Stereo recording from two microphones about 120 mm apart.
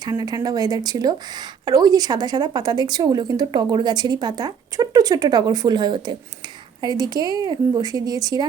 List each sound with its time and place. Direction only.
0.0 s speech: 35° right (ahead or behind)